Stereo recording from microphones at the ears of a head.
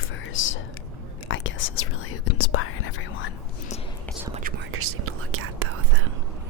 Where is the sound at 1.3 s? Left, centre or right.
Left.